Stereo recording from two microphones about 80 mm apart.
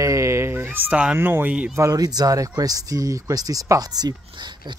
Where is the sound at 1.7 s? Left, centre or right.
Right.